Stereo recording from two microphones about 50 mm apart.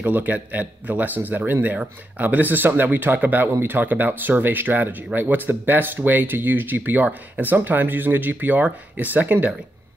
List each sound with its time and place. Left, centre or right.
0.0 s speech: right